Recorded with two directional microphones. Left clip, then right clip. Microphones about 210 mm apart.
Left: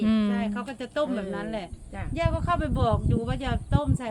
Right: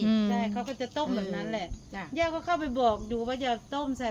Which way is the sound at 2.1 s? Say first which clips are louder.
Left 1 dB; 45° left (ahead or behind).